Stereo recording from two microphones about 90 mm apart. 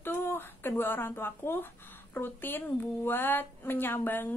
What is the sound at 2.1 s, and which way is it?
Speech, 25° left (ahead or behind).